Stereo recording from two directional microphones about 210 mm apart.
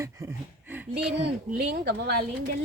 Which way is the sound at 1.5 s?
50° right (ahead or behind).